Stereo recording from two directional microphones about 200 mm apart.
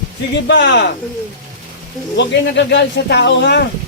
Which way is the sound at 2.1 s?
60° left (ahead or behind).